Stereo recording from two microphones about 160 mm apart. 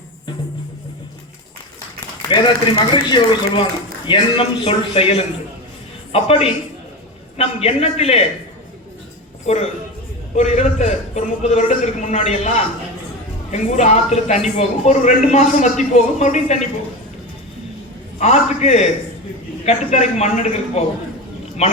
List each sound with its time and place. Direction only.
2.3 s a man's voice: 30° left (ahead or behind)
10.3 s speech: 45° left (ahead or behind)
18.2 s a man's voice: 45° left (ahead or behind)